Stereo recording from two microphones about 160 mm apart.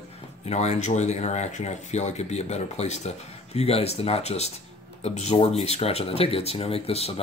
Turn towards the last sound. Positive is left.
turn(degrees=40)  # may be behind; listen again after turning